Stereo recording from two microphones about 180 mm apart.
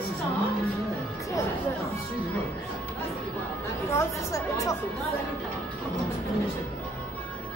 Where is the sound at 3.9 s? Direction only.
15° left (ahead or behind).